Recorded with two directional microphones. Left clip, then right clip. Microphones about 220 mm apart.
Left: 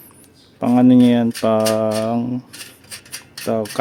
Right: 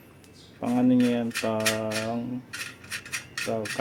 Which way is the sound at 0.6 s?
50° left (ahead or behind).